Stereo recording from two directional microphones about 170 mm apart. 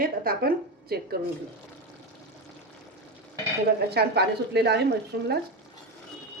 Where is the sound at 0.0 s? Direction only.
60° right (ahead or behind).